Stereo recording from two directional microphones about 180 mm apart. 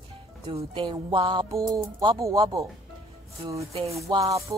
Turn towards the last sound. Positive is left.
turn(degrees=-20)  # may be behind; listen again after turning